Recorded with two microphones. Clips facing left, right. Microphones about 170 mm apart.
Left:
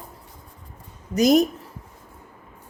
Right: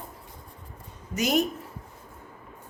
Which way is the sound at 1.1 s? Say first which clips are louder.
Left 8 dB; 40° left (ahead or behind).